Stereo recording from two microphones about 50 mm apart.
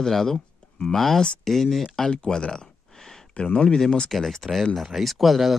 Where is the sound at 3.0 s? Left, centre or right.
Centre.